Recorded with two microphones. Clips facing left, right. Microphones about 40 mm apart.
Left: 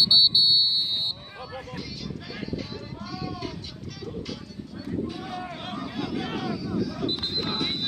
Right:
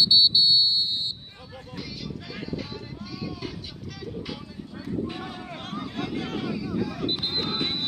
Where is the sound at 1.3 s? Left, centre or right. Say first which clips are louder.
Left 6 dB; left.